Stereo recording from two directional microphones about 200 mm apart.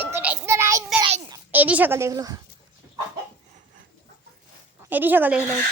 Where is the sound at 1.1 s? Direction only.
20° right (ahead or behind).